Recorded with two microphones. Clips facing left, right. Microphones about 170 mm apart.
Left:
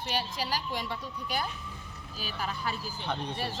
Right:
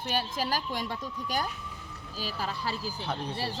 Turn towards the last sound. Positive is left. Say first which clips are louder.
# right 1 dB
turn(degrees=-30)  # may be behind; listen again after turning